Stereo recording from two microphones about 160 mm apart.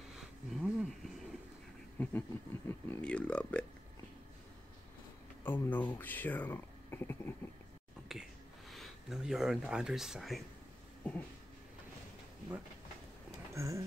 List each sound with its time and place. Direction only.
0.1 s a sound: centre (ahead or behind)
2.0 s speech: 15° left (ahead or behind)
5.4 s speech: 10° left (ahead or behind)
8.1 s speech: centre (ahead or behind)
13.5 s speech: 20° right (ahead or behind)